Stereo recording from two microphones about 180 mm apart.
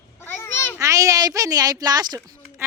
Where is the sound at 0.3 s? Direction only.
10° left (ahead or behind).